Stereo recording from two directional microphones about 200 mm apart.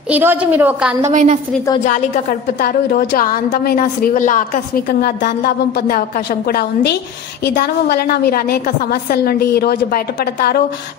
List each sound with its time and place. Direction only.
0.1 s a woman's voice: 10° right (ahead or behind)
1.0 s a woman's voice: 35° right (ahead or behind)
1.9 s a woman's voice: 40° left (ahead or behind)